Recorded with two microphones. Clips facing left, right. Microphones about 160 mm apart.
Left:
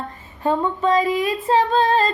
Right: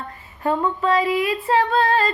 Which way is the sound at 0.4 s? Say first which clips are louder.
Left 1 dB; 20° left (ahead or behind).